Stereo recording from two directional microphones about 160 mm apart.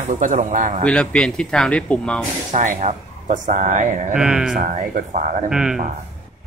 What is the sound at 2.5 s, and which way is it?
Speech, 55° right (ahead or behind).